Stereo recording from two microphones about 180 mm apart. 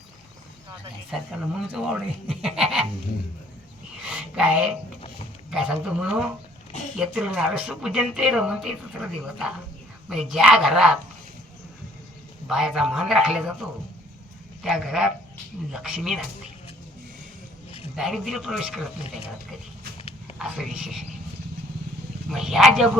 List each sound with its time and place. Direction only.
1.1 s speech: centre (ahead or behind)
4.0 s speech: 5° right (ahead or behind)
12.5 s speech: centre (ahead or behind)
14.6 s speech: centre (ahead or behind)
17.9 s speech: centre (ahead or behind)
20.0 s a sound: 35° left (ahead or behind)
20.4 s speech: 5° right (ahead or behind)
22.3 s speech: centre (ahead or behind)